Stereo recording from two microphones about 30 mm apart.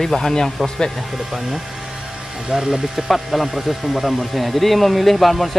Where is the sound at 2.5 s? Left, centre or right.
Centre.